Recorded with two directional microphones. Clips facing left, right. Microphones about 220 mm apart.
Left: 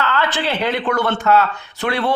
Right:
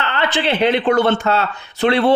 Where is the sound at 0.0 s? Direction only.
20° right (ahead or behind).